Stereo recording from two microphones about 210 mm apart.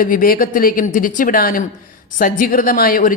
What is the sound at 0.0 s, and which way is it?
A woman's voice, 40° left (ahead or behind).